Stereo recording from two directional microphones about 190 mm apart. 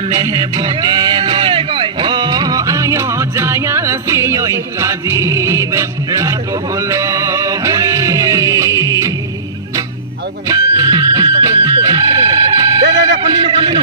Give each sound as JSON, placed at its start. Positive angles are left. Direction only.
{"t": 0.2, "sound": "music", "side_deg": -20}
{"t": 10.5, "sound": "music", "side_deg": -20}
{"t": 12.8, "sound": "a sound", "side_deg": -65}
{"t": 13.3, "sound": "a man's voice", "side_deg": -25}